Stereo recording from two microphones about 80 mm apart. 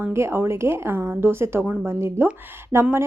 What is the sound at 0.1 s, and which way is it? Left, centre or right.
A woman's voice, right.